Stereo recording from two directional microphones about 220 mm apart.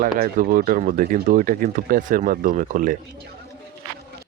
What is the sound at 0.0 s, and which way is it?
Speech, 40° right (ahead or behind).